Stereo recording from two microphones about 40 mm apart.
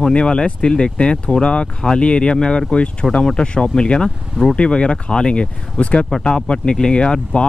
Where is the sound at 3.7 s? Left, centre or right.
Left.